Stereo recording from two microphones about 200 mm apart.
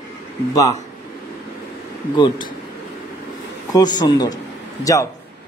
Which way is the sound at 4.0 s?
20° left (ahead or behind).